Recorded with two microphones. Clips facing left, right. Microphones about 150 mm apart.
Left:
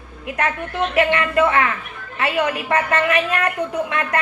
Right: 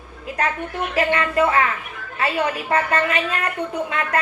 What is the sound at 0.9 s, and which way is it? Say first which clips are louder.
A woman's voice: left 2 dB; 30° right (ahead or behind).